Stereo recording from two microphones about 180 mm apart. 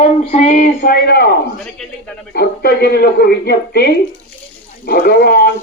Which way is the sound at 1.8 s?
5° left (ahead or behind).